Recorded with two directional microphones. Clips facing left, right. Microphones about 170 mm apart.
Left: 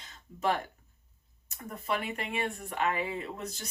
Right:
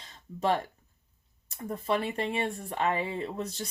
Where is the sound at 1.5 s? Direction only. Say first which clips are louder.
Right 4 dB; 30° right (ahead or behind).